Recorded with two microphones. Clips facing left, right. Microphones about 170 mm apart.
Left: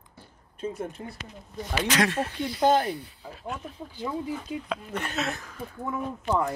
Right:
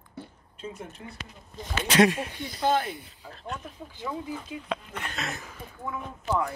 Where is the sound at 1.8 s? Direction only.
25° right (ahead or behind).